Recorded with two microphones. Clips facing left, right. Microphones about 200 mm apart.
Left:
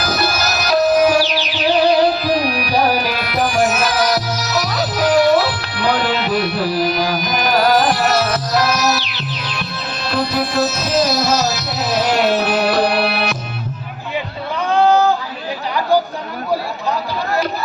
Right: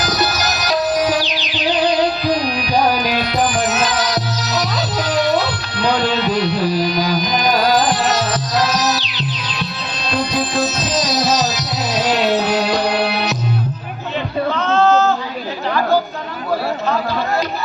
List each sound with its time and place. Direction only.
0.0 s music: 15° right (ahead or behind)
14.7 s female singing: 15° left (ahead or behind)